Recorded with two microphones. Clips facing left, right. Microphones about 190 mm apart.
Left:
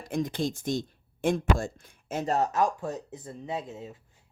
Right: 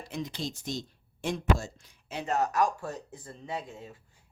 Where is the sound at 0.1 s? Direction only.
50° left (ahead or behind).